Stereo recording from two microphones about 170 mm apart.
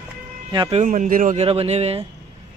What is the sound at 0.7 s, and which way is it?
Speech, 50° right (ahead or behind).